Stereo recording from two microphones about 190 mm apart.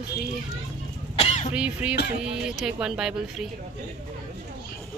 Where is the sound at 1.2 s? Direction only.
35° left (ahead or behind).